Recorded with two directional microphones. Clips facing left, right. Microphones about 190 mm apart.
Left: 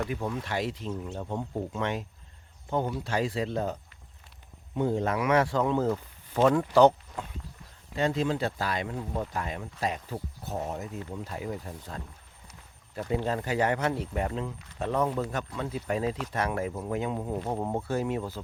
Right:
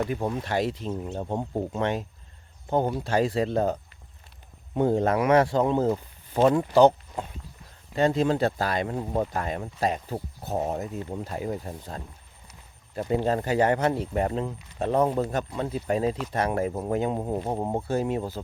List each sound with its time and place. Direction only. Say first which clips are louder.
0.1 s speech: right 4 dB; 35° right (ahead or behind); by 6.9 s 20° right (ahead or behind)
7.9 s speech: right 5 dB; 40° right (ahead or behind)